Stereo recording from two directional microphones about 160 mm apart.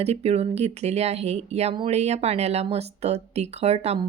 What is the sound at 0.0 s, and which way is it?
Speech, 40° right (ahead or behind).